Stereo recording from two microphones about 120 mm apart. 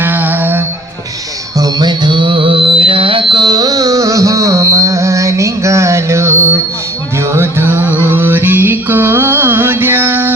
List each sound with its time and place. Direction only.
0.0 s music: 15° right (ahead or behind)
1.5 s music: 35° right (ahead or behind); by 10.3 s 15° right (ahead or behind)